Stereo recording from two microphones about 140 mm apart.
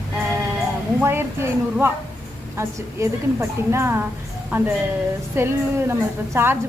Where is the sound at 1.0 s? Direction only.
15° right (ahead or behind).